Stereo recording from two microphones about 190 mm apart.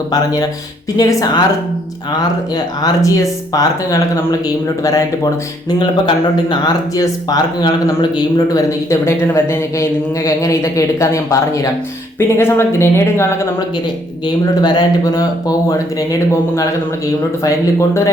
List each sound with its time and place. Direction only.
0.1 s speech: 20° left (ahead or behind)
2.8 s speech: 20° left (ahead or behind)
14.6 s speech: 20° left (ahead or behind)